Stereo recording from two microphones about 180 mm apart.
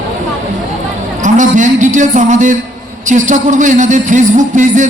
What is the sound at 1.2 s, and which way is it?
A man's voice, 45° right (ahead or behind).